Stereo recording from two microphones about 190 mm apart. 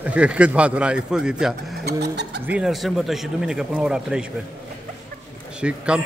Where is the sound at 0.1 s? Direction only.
5° right (ahead or behind).